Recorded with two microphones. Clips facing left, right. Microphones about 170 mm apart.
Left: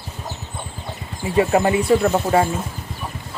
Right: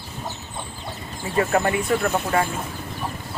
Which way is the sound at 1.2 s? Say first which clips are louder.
Left 4 dB; 20° left (ahead or behind).